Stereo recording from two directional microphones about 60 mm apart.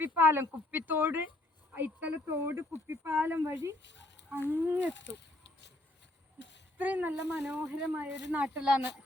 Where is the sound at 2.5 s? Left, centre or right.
Right.